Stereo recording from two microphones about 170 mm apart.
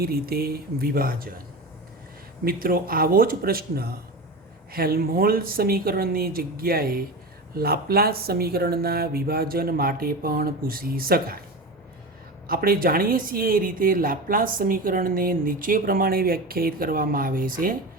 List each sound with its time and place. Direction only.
0.0 s speech: 65° right (ahead or behind)
2.4 s speech: 60° right (ahead or behind)
12.5 s speech: 60° right (ahead or behind)